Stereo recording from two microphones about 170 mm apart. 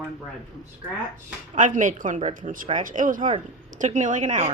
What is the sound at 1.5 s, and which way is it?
Speech, 50° right (ahead or behind).